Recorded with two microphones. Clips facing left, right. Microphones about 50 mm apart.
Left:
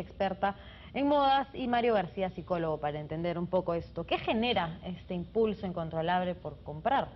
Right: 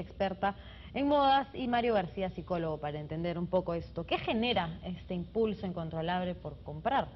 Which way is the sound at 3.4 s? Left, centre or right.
Left.